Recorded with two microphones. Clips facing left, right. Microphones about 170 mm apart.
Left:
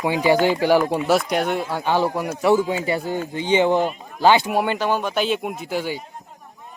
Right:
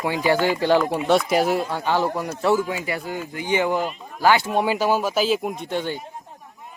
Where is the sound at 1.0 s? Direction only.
Centre (ahead or behind).